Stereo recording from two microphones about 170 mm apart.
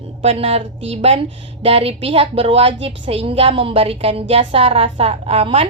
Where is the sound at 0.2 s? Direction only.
35° right (ahead or behind).